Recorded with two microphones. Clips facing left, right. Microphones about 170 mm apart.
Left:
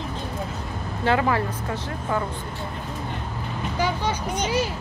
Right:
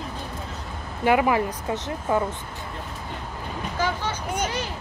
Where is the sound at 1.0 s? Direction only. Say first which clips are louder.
Right 2 dB; 15° right (ahead or behind).